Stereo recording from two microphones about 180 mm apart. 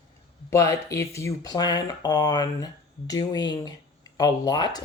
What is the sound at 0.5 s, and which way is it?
Speech, 15° left (ahead or behind).